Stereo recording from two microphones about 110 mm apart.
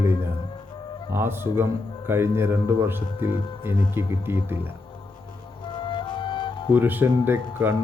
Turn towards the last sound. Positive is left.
turn(degrees=-20)  # may be behind; listen again after turning